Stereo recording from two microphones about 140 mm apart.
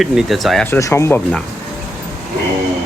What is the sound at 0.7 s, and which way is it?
Speech, 20° left (ahead or behind).